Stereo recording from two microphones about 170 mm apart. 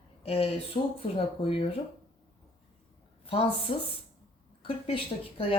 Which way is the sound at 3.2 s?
35° left (ahead or behind).